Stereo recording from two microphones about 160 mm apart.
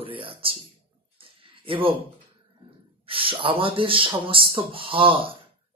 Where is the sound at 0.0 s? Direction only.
35° right (ahead or behind).